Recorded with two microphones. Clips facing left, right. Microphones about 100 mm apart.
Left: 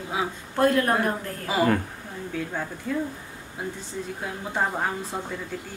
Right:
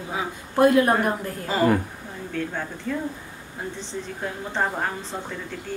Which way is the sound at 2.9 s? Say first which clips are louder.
Even; 10° left (ahead or behind).